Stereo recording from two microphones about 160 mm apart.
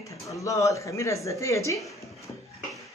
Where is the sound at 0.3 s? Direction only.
20° left (ahead or behind).